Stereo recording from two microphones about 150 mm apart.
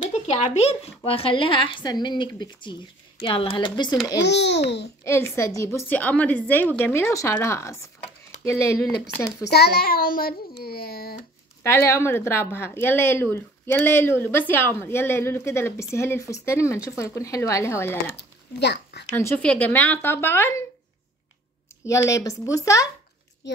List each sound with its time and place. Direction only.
0.0 s speech: 45° left (ahead or behind); by 4.0 s 30° left (ahead or behind)
5.0 s speech: 15° left (ahead or behind)
9.5 s a child's voice: 90° left
11.6 s speech: 15° left (ahead or behind)
19.1 s speech: 10° left (ahead or behind)
21.8 s speech: 20° left (ahead or behind)